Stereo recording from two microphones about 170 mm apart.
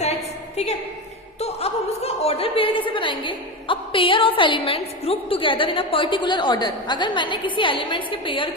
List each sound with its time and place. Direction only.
0.5 s a woman's voice: 40° left (ahead or behind)